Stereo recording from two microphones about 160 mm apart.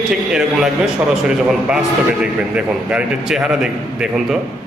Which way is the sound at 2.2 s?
10° right (ahead or behind).